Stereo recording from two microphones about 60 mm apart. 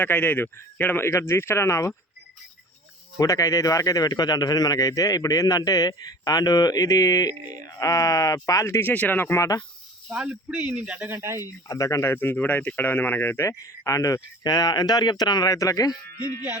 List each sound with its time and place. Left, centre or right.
0.0 s speech: left
1.0 s speech: left
3.2 s a man's voice: left
8.8 s speech: left
9.3 s speech: left
10.8 s speech: right
11.1 s speech: right
11.4 s speech: left
12.0 s speech: left
13.6 s a man's voice: left
15.4 s speech: left